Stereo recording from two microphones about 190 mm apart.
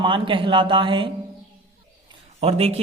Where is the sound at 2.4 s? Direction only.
30° right (ahead or behind).